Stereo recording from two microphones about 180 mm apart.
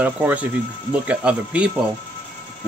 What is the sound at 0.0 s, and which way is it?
Speech, 10° right (ahead or behind).